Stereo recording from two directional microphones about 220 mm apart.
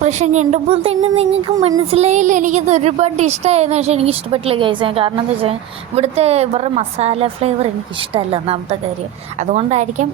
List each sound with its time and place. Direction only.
0.0 s a woman's voice: 30° right (ahead or behind)